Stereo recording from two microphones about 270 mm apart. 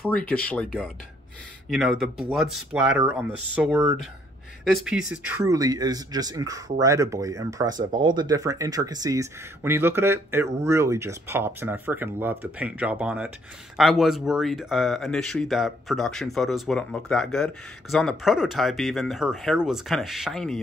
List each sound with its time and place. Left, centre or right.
0.0 s speech: centre
1.7 s speech: centre
7.7 s speech: right
8.2 s speech: centre